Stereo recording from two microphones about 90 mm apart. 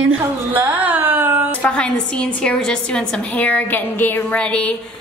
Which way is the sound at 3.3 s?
15° left (ahead or behind).